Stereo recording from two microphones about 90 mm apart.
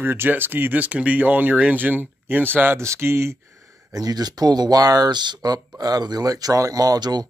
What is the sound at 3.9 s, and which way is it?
Speech, 45° right (ahead or behind).